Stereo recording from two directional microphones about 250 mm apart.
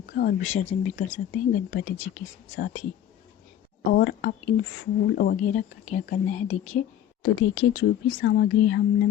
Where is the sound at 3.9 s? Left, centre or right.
Left.